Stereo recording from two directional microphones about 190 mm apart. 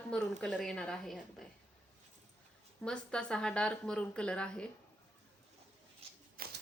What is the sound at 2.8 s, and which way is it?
Speech, 5° left (ahead or behind).